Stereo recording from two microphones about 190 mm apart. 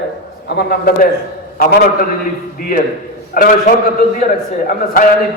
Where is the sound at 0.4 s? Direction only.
55° left (ahead or behind).